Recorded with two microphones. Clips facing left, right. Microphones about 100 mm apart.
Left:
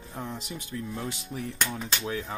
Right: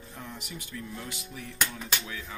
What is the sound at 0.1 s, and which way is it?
A man's voice, 30° left (ahead or behind).